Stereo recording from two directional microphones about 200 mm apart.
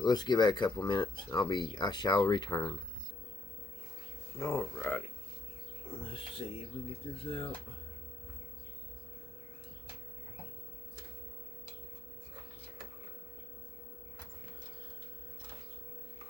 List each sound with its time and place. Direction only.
0.0 s speech: 20° left (ahead or behind)
4.4 s speech: 10° left (ahead or behind)
7.3 s speech: 25° left (ahead or behind)